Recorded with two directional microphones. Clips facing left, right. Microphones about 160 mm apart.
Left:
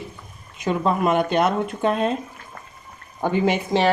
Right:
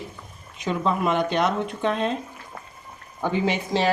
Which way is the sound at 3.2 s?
50° left (ahead or behind).